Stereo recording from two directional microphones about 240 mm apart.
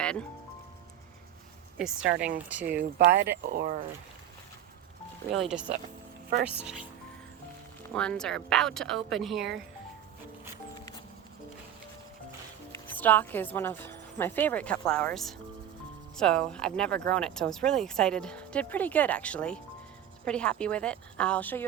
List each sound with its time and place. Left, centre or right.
0.0 s music: centre
1.8 s speech: centre
3.0 s speech: right
5.3 s speech: centre
7.9 s speech: centre
10.8 s music: centre
13.0 s a woman's voice: centre